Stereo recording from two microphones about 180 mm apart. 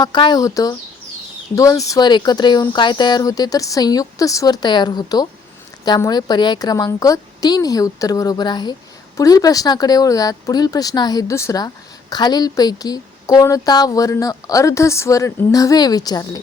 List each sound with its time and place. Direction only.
0.0 s speech: 25° left (ahead or behind)